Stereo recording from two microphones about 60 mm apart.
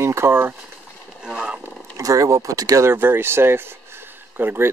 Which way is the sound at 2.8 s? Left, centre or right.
Right.